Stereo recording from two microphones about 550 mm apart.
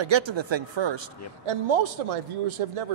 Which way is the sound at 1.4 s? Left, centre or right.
Right.